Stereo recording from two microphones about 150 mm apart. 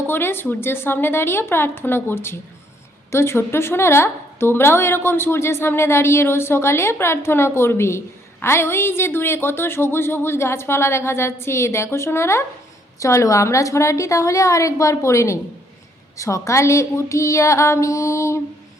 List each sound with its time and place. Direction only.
0.1 s a woman's voice: 15° left (ahead or behind)